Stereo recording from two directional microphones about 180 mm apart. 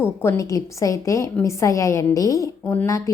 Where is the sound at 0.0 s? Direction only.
10° left (ahead or behind).